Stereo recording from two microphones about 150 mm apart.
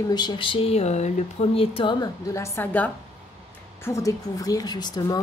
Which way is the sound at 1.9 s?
20° left (ahead or behind).